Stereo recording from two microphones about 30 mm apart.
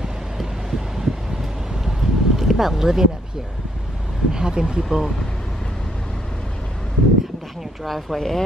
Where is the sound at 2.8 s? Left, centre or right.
Centre.